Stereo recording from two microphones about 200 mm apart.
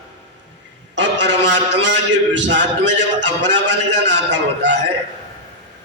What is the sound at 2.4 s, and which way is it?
A man's voice, 60° right (ahead or behind).